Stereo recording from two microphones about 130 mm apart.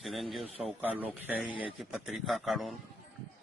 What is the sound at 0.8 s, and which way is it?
A man's voice, 10° right (ahead or behind).